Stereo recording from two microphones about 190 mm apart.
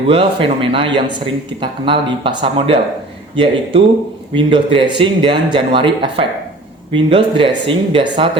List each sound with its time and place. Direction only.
0.1 s speech: 25° right (ahead or behind)